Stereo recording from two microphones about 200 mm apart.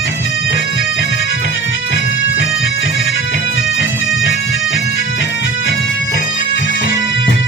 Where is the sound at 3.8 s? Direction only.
70° left (ahead or behind).